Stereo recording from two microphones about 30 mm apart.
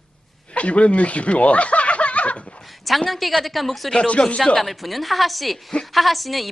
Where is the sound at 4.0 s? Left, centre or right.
Left.